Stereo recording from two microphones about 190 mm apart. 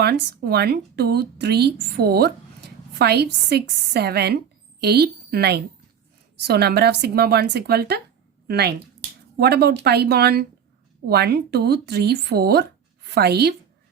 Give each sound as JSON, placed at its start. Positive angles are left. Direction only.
{"t": 0.0, "sound": "a woman's voice", "side_deg": -55}